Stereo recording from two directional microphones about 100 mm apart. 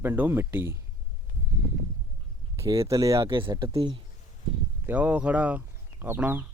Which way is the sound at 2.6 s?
30° right (ahead or behind).